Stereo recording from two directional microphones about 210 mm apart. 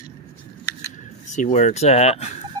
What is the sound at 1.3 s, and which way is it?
Speech, 35° left (ahead or behind).